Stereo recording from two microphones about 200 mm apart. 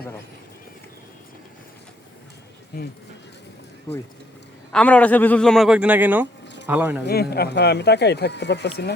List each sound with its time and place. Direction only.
4.7 s a man's voice: 5° left (ahead or behind); by 7.0 s 10° right (ahead or behind)
7.0 s speech: 50° left (ahead or behind)